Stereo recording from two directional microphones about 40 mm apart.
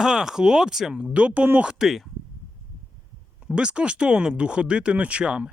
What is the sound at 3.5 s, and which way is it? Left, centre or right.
Speech, right.